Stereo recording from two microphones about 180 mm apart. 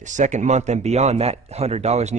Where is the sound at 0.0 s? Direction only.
45° right (ahead or behind).